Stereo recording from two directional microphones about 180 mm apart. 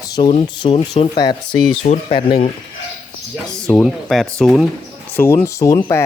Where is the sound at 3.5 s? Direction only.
5° left (ahead or behind).